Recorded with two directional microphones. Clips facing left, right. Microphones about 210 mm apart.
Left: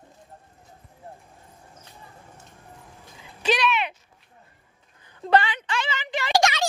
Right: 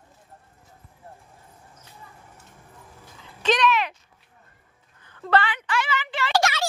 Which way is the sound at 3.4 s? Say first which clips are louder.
Right 1 dB; 10° left (ahead or behind).